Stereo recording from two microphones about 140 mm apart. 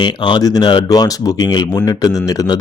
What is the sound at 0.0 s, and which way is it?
Speech, 30° left (ahead or behind).